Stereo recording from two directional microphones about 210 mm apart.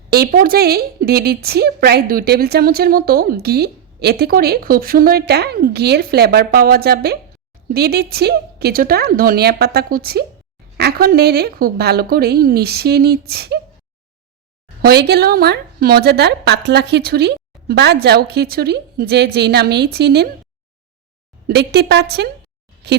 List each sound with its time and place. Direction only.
0.1 s a woman's voice: 45° right (ahead or behind)
14.8 s a woman's voice: 50° right (ahead or behind)
21.4 s a woman's voice: 50° right (ahead or behind)